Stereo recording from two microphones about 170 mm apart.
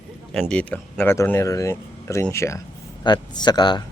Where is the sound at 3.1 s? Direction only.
25° left (ahead or behind).